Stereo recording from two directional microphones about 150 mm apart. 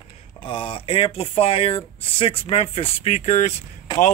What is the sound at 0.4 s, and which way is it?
Speech, 35° left (ahead or behind).